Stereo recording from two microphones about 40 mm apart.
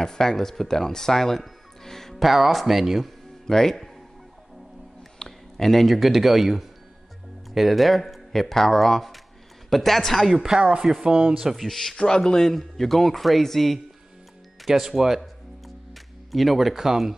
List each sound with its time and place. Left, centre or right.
0.0 s speech: centre
2.2 s speech: centre
3.4 s speech: centre
5.2 s a sound: centre
5.9 s speech: centre
10.3 s speech: centre
10.6 s speech: right
10.9 s speech: centre
11.5 s speech: centre
12.0 s speech: left; by 13.7 s centre
14.6 s speech: centre